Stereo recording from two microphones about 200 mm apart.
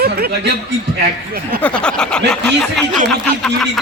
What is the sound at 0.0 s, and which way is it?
Speech, 50° right (ahead or behind).